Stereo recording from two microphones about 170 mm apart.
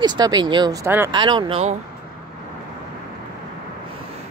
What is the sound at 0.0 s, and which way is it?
Speech, 25° right (ahead or behind).